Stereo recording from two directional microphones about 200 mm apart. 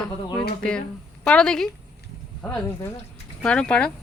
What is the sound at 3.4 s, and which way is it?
Speech, 5° left (ahead or behind).